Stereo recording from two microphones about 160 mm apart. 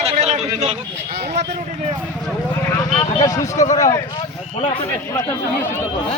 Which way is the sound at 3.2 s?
20° left (ahead or behind).